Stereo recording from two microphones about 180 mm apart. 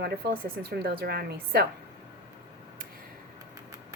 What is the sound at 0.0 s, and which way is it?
A woman's voice, 65° right (ahead or behind).